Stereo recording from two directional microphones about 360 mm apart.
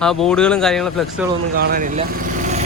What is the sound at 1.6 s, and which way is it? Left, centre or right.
Speech, right.